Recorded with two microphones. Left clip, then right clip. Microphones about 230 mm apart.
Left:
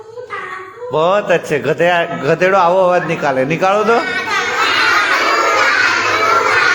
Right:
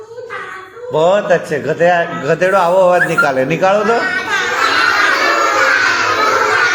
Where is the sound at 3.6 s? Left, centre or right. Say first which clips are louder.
Even; centre.